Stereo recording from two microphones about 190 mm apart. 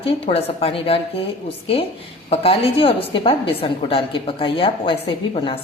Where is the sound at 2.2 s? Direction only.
30° left (ahead or behind).